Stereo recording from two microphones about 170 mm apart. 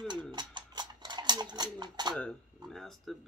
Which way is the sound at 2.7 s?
Centre (ahead or behind).